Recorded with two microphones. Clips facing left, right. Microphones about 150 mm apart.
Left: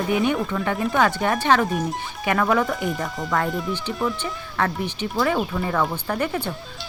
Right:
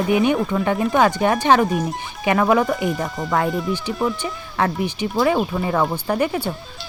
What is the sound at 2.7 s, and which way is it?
Speech, centre (ahead or behind).